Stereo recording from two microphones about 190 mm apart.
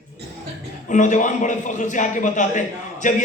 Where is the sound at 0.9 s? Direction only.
40° left (ahead or behind).